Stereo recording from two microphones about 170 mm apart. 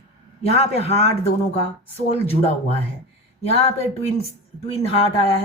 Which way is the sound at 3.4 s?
35° left (ahead or behind).